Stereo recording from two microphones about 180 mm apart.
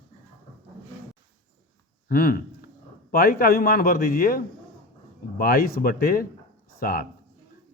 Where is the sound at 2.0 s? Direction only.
50° left (ahead or behind).